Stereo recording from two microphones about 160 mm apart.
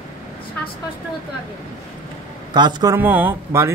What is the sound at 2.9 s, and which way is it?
Speech, 10° right (ahead or behind).